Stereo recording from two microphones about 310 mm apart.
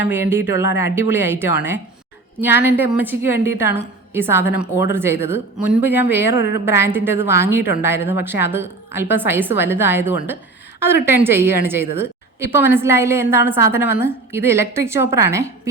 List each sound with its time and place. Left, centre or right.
0.1 s a woman's voice: centre